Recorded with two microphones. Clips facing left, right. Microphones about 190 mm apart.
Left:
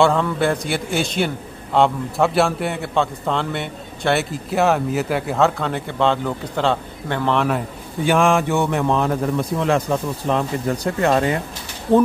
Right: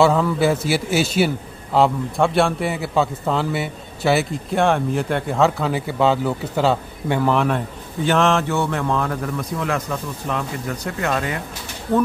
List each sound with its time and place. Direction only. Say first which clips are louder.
0.0 s a man's voice: right 1 dB; 5° right (ahead or behind)
8.0 s a man's voice: left 1 dB; 10° left (ahead or behind); by 12.0 s 30° left (ahead or behind)